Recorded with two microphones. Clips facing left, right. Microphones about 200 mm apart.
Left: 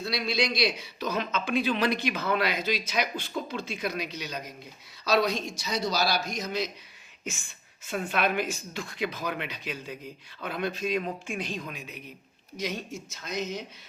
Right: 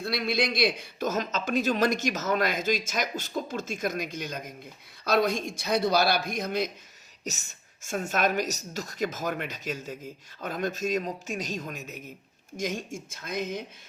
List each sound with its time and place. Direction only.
0.0 s a man's voice: 55° right (ahead or behind)
7.3 s a man's voice: 40° right (ahead or behind)